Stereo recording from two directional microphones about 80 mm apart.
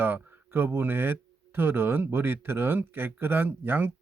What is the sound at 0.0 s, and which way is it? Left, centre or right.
Speech, right.